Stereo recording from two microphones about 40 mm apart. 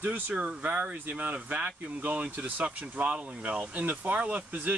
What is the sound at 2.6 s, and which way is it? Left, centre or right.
Speech, right.